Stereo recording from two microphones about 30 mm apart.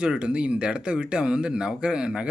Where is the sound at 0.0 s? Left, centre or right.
Right.